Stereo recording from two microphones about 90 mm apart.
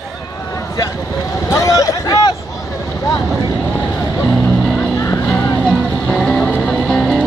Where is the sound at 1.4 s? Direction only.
40° left (ahead or behind).